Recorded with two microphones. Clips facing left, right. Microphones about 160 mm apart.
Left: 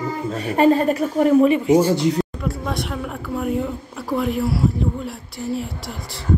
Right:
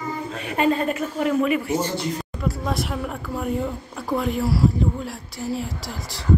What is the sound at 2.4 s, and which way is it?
A woman's voice, centre (ahead or behind).